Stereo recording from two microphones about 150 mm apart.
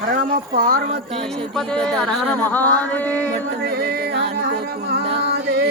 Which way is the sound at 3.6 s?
90° right.